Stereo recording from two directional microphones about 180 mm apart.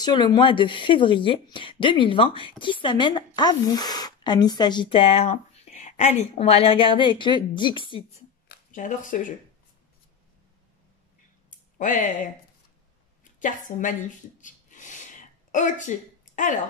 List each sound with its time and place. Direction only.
0.0 s speech: 25° left (ahead or behind)
8.7 s speech: 45° left (ahead or behind)
11.5 s a sound: 45° left (ahead or behind)